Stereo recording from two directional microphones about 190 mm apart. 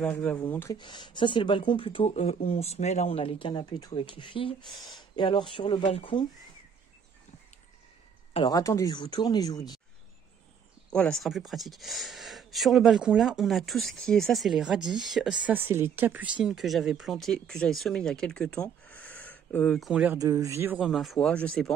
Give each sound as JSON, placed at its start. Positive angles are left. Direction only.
{"t": 0.0, "sound": "speech", "side_deg": 10}
{"t": 0.7, "sound": "speech", "side_deg": 25}
{"t": 8.3, "sound": "speech", "side_deg": 25}
{"t": 10.9, "sound": "speech", "side_deg": 5}
{"t": 19.9, "sound": "speech", "side_deg": -5}
{"t": 20.2, "sound": "speech", "side_deg": -20}